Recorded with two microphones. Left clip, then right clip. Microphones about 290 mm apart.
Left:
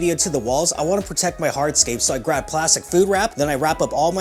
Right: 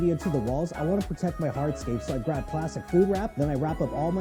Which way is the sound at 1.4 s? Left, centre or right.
Centre.